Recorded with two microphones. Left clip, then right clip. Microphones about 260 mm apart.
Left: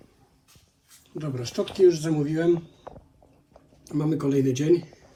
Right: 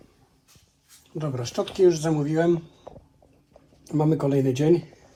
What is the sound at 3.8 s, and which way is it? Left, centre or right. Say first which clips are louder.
Speech: right 3 dB; centre.